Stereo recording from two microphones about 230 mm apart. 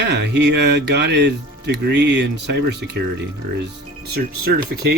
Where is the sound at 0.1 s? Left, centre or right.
Right.